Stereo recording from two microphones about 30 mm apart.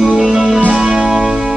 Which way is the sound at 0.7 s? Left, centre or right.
Right.